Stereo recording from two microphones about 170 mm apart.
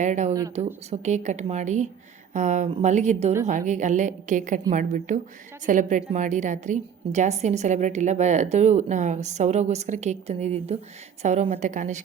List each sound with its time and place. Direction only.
0.0 s a woman's voice: 45° right (ahead or behind)